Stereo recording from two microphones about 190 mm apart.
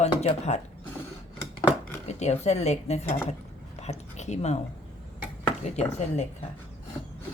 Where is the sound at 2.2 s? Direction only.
35° left (ahead or behind).